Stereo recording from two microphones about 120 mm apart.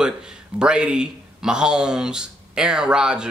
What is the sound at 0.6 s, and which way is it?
Speech, 5° right (ahead or behind).